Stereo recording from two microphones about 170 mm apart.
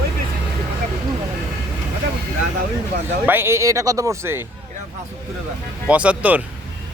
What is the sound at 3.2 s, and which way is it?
Speech, 10° right (ahead or behind).